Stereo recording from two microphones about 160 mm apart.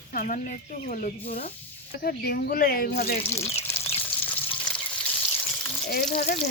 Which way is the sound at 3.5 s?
15° left (ahead or behind).